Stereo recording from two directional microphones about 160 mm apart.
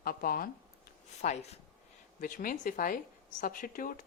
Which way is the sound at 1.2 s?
45° left (ahead or behind).